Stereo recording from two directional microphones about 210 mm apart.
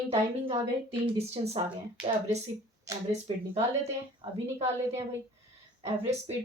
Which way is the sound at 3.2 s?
30° right (ahead or behind).